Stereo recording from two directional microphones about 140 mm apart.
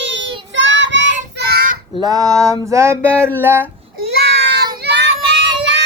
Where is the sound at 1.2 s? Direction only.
85° right.